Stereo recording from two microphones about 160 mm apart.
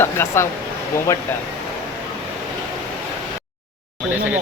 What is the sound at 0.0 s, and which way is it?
Speech, 15° left (ahead or behind).